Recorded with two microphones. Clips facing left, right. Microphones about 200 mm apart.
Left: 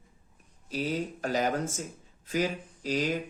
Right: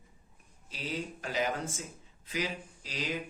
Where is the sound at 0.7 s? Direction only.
45° left (ahead or behind).